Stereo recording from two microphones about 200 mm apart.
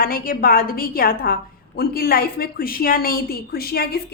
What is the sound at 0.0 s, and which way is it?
A woman's voice, 45° left (ahead or behind).